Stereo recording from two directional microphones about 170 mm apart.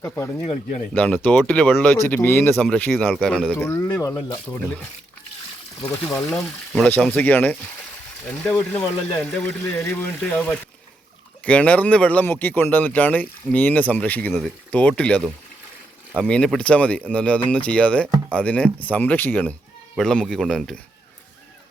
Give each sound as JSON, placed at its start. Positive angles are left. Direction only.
{"t": 0.0, "sound": "speech", "side_deg": 15}
{"t": 0.4, "sound": "speech", "side_deg": 35}
{"t": 0.9, "sound": "speech", "side_deg": 10}
{"t": 3.7, "sound": "speech", "side_deg": 20}
{"t": 6.2, "sound": "speech", "side_deg": 5}